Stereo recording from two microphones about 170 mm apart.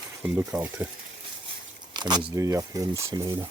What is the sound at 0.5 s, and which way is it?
Speech, 15° right (ahead or behind).